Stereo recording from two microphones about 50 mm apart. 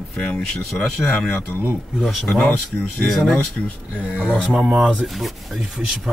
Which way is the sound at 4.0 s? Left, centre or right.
Left.